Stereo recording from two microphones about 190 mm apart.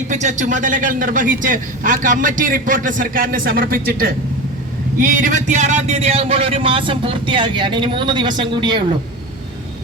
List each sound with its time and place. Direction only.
0.1 s a man's voice: 40° right (ahead or behind); by 8.8 s 25° right (ahead or behind)